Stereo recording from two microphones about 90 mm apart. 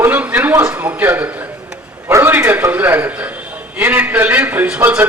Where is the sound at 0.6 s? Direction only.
20° right (ahead or behind).